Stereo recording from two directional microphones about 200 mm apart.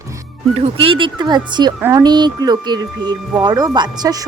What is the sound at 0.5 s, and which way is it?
Speech, 30° right (ahead or behind).